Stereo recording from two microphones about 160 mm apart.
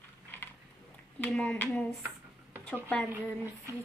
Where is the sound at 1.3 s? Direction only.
5° left (ahead or behind).